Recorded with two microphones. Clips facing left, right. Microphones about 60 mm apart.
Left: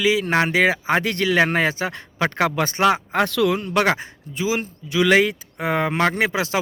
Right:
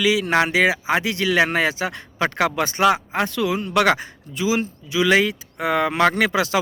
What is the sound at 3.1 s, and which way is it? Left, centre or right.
Speech, left.